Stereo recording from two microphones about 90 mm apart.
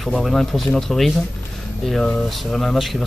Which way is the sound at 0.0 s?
Centre (ahead or behind).